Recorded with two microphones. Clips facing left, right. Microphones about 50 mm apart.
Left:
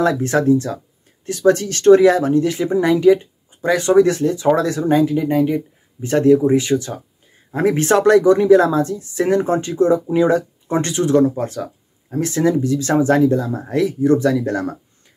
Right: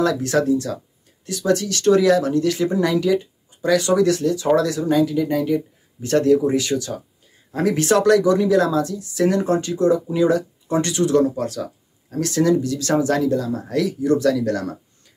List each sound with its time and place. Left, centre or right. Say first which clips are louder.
0.0 s speech: left 2 dB; left